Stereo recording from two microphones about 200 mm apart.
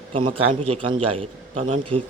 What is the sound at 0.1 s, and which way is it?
A man's voice, 25° right (ahead or behind).